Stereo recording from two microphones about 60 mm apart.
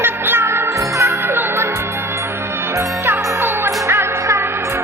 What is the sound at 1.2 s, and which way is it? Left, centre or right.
Music, right.